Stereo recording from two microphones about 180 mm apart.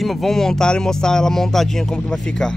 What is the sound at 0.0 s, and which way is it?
Speech, centre (ahead or behind).